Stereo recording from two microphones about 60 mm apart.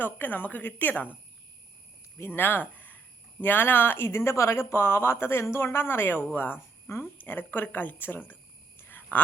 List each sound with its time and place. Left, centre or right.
0.0 s a woman's voice: left
2.1 s speech: left
8.8 s a sound: left